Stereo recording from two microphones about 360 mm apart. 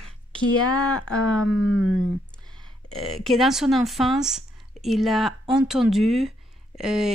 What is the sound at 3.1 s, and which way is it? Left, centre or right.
Speech, centre.